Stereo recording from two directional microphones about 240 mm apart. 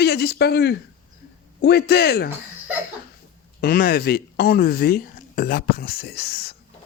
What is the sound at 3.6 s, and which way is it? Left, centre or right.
Speech, left.